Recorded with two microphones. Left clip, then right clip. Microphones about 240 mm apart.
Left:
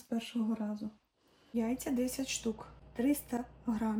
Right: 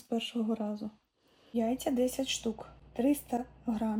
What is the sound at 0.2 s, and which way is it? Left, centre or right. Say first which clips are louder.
Speech: right 1 dB; left.